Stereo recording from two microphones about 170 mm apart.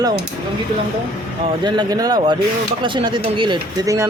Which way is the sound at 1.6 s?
25° right (ahead or behind).